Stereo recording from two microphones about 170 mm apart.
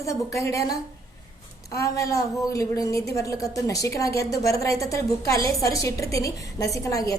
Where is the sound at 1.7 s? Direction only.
20° left (ahead or behind).